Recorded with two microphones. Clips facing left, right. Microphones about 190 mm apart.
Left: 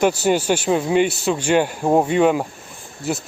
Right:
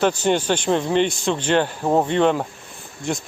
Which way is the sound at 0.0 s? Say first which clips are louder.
Left 2 dB; 10° left (ahead or behind).